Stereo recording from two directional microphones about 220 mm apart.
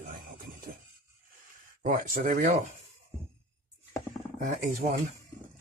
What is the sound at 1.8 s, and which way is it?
Speech, 35° right (ahead or behind).